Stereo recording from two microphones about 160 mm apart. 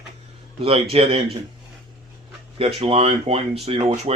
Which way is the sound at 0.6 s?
35° right (ahead or behind).